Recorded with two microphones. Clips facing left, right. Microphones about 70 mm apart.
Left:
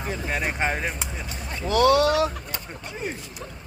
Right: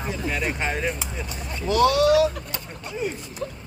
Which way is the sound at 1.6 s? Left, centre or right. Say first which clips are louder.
Even; left.